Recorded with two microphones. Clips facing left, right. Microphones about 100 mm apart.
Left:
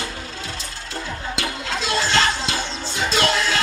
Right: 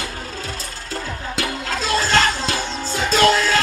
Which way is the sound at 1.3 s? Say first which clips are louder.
Right 3 dB; 45° right (ahead or behind).